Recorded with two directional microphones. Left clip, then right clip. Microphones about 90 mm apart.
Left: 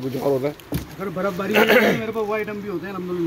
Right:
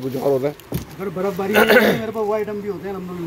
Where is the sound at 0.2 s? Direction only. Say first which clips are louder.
Right 3 dB; 40° right (ahead or behind).